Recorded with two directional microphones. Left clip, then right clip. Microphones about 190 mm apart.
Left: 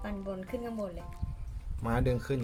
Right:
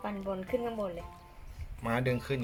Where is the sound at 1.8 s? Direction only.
70° left (ahead or behind).